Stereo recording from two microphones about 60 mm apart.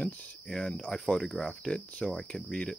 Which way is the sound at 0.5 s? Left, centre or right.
Centre.